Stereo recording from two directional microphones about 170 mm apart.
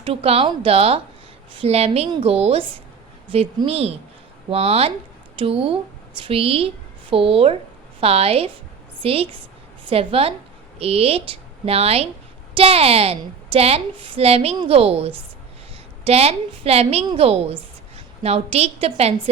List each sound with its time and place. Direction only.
0.0 s a woman's voice: 35° right (ahead or behind)